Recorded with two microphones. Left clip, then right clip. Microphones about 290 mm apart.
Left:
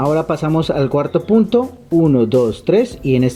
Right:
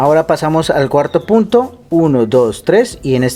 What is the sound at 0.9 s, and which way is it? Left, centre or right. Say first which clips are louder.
Speech: right 2 dB; right.